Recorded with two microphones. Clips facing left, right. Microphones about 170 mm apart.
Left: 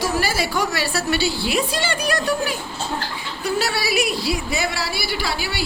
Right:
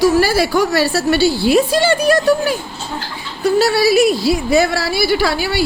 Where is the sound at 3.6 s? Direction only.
40° right (ahead or behind).